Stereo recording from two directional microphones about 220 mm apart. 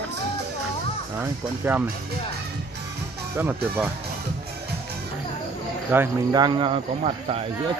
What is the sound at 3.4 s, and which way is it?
Speech, 10° right (ahead or behind).